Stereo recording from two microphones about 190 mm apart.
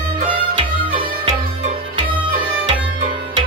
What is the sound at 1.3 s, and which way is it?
Tabla, 35° right (ahead or behind).